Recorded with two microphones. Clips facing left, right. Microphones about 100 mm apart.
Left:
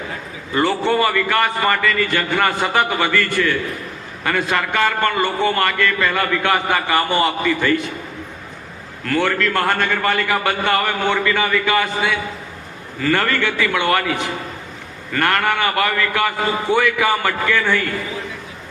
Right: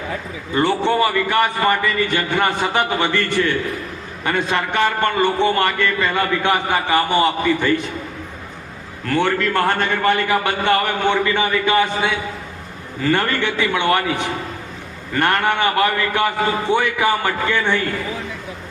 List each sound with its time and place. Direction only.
0.5 s a man's voice: 20° right (ahead or behind)
9.0 s a man's voice: 20° right (ahead or behind)